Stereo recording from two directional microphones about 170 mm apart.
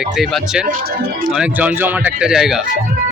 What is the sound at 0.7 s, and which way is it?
Speech, 60° right (ahead or behind).